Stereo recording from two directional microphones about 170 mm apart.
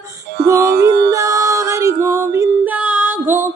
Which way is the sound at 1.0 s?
20° right (ahead or behind).